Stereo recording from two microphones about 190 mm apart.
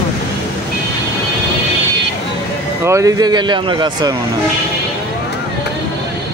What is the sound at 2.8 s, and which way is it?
Speech, 15° right (ahead or behind).